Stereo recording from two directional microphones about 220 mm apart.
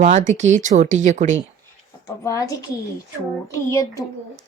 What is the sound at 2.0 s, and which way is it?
A woman's voice, 15° left (ahead or behind).